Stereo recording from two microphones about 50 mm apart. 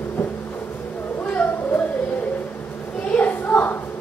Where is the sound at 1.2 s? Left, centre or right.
Left.